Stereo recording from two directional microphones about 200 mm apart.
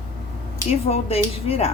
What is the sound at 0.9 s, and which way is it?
Speech, 30° left (ahead or behind).